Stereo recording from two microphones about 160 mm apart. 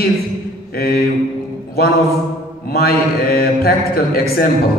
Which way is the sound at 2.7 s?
70° left (ahead or behind).